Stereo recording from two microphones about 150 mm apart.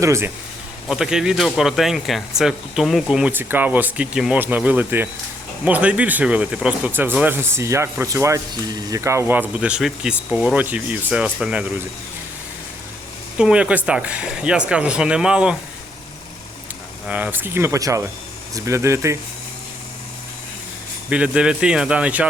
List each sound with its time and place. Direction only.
0.0 s speech: 20° right (ahead or behind)
0.9 s speech: 5° right (ahead or behind)
13.4 s speech: 5° right (ahead or behind)
17.1 s speech: 10° right (ahead or behind)
21.1 s speech: 5° right (ahead or behind)